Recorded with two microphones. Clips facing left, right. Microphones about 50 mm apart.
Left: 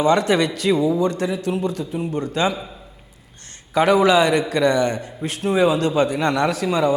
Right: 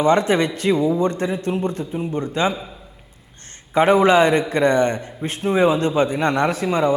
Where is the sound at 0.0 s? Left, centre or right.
Right.